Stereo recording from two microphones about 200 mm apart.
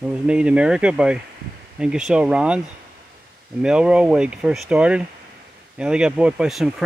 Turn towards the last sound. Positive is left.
turn(degrees=0)  # may be behind; listen again after turning